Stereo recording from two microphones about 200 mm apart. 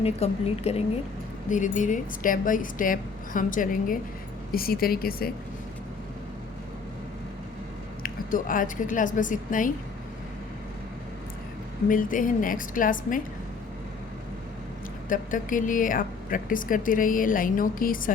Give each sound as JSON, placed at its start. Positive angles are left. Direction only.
{"t": 0.0, "sound": "speech", "side_deg": 30}
{"t": 8.0, "sound": "speech", "side_deg": 45}
{"t": 11.9, "sound": "speech", "side_deg": 40}
{"t": 15.1, "sound": "speech", "side_deg": 40}